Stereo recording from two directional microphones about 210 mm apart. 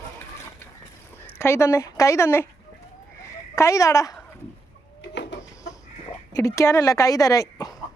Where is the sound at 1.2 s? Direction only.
10° left (ahead or behind).